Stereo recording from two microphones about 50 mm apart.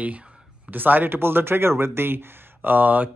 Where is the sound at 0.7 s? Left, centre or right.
Right.